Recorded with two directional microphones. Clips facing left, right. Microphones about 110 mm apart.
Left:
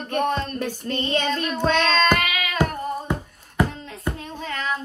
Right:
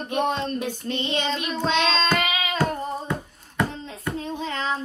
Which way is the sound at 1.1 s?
50° left (ahead or behind).